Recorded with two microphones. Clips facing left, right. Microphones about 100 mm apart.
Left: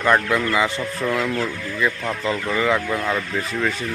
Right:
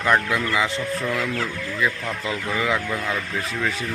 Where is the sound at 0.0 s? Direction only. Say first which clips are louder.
Left 2 dB; centre (ahead or behind).